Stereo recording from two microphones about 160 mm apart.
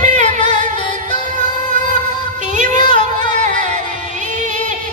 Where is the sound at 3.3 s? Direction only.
50° right (ahead or behind).